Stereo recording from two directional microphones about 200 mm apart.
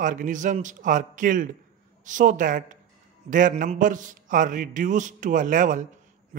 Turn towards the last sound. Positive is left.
turn(degrees=-40)  # may be behind; listen again after turning